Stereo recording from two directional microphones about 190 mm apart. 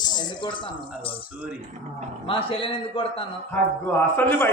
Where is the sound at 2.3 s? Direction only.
30° left (ahead or behind).